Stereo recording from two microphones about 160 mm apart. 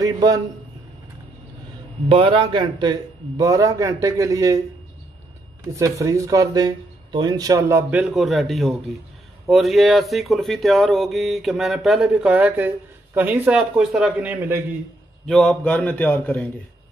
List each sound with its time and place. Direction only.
0.0 s a man's voice: 25° right (ahead or behind)
2.0 s speech: 35° right (ahead or behind)
5.6 s speech: 20° right (ahead or behind)
15.2 s a man's voice: 5° left (ahead or behind)